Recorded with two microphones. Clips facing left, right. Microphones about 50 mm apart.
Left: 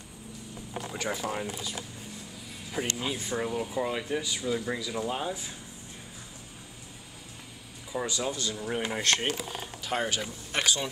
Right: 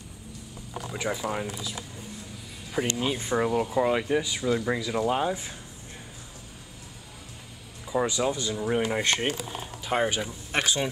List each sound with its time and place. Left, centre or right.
0.9 s speech: centre
2.8 s speech: centre
3.2 s speech: right
7.9 s speech: right